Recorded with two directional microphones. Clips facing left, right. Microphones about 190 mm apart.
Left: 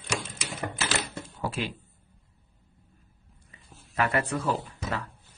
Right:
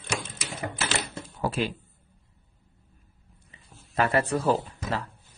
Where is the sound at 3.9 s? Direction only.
30° right (ahead or behind).